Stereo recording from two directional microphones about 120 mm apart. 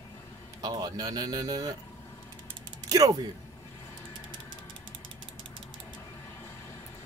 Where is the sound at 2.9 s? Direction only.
30° right (ahead or behind).